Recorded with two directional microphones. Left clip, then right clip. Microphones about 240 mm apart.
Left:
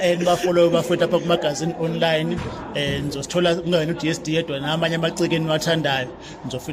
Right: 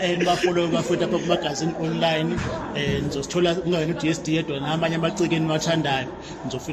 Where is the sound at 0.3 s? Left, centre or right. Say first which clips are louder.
Left 6 dB; left.